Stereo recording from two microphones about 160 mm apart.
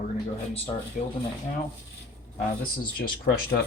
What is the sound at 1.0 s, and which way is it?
Speech, 55° left (ahead or behind).